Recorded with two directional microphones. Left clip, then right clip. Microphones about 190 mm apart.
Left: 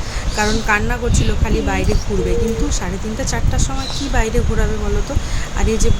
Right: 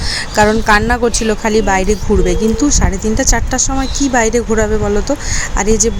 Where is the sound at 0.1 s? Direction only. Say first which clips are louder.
Right 8 dB; 40° right (ahead or behind).